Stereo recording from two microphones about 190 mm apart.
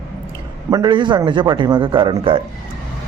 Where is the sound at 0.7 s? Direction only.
25° right (ahead or behind).